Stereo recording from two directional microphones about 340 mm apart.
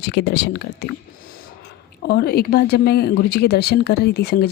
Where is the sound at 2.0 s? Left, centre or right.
Left.